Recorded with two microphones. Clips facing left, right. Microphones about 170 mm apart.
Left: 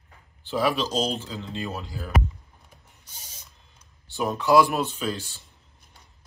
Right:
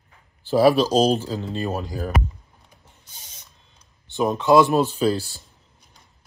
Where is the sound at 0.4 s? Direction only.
40° right (ahead or behind).